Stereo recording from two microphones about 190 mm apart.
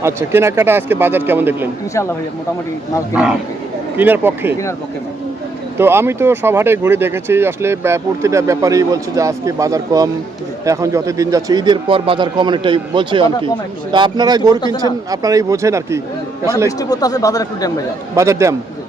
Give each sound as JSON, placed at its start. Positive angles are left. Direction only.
{"t": 0.0, "sound": "speech", "side_deg": -15}
{"t": 3.9, "sound": "speech", "side_deg": -10}
{"t": 5.7, "sound": "speech", "side_deg": -10}
{"t": 16.6, "sound": "speech", "side_deg": 20}
{"t": 18.1, "sound": "speech", "side_deg": -15}